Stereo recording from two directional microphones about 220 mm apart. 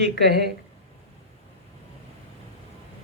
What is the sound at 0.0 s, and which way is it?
Speech, 50° right (ahead or behind).